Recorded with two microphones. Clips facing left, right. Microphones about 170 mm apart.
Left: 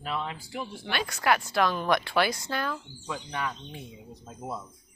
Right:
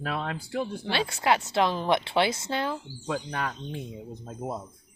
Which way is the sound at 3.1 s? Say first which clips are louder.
Right 3 dB; 50° right (ahead or behind).